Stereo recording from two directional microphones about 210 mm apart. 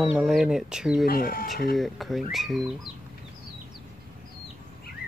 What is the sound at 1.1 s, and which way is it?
Speech, 45° left (ahead or behind).